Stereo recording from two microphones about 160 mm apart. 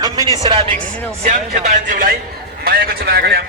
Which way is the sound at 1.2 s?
60° right (ahead or behind).